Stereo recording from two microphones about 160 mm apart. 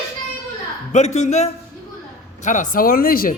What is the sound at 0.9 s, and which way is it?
A man's voice, 45° left (ahead or behind).